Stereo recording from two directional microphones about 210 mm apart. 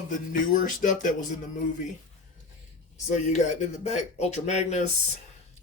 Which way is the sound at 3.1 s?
35° left (ahead or behind).